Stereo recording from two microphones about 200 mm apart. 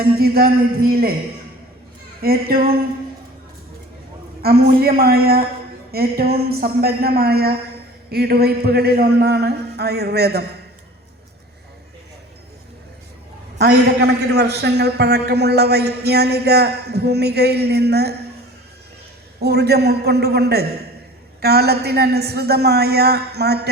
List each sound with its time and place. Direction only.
0.0 s a man's voice: 50° right (ahead or behind)
2.2 s a man's voice: 50° right (ahead or behind)
4.4 s a man's voice: 50° right (ahead or behind)
13.6 s a man's voice: 55° right (ahead or behind)
19.4 s a man's voice: 55° right (ahead or behind)